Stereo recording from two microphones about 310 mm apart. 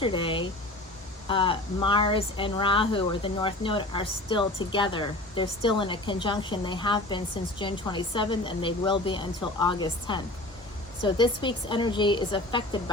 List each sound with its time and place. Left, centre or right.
0.0 s speech: centre